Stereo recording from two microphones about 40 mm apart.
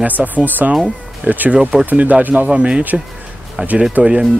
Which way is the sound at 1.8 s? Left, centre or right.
Right.